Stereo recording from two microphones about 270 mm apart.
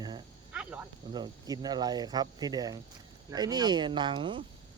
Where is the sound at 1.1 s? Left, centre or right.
Centre.